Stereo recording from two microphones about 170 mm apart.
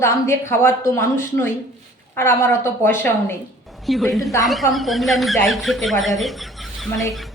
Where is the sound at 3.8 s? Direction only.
Centre (ahead or behind).